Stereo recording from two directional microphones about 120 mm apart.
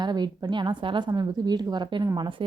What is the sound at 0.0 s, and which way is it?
A woman's voice, 40° right (ahead or behind).